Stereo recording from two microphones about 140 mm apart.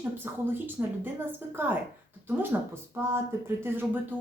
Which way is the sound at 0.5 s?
15° right (ahead or behind).